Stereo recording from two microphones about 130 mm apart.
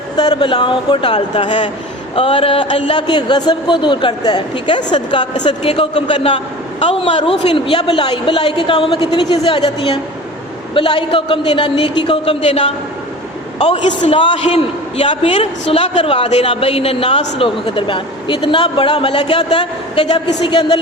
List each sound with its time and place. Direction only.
0.2 s a man's voice: 35° left (ahead or behind)